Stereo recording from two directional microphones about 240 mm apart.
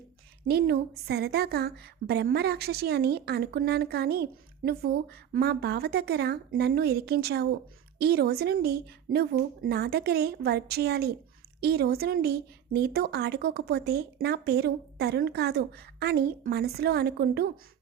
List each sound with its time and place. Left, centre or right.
0.4 s a woman's voice: right